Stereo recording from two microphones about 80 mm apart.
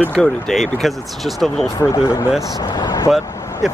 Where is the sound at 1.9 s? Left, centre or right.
Left.